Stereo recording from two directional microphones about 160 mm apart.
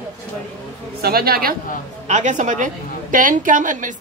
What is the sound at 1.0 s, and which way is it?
Speech, 75° right (ahead or behind).